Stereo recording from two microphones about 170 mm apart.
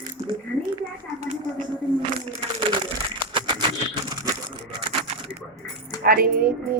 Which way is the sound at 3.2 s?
30° right (ahead or behind).